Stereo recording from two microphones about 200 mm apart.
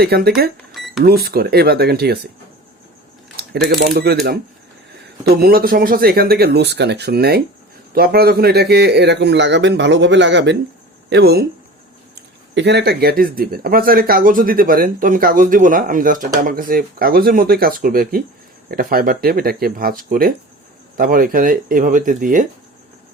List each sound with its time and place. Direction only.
0.0 s speech: 50° right (ahead or behind)
0.7 s cash register: centre (ahead or behind)
1.0 s speech: 50° right (ahead or behind)
3.3 s a man's voice: 50° right (ahead or behind)
12.5 s speech: 55° right (ahead or behind)